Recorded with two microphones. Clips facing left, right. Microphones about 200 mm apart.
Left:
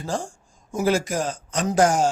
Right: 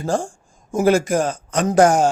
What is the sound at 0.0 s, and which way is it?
Speech, 50° right (ahead or behind).